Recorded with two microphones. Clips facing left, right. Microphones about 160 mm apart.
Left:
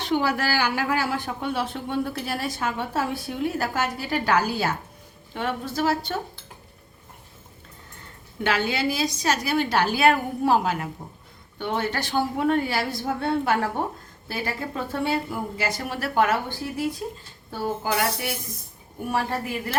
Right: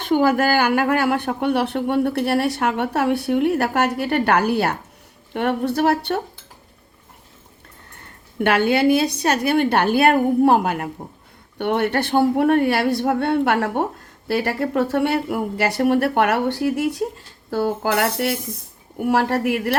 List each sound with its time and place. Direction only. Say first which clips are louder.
0.0 s speech: right 7 dB; 50° right (ahead or behind)
8.4 s speech: right 7 dB; 60° right (ahead or behind)
19.0 s speech: right 8 dB; 80° right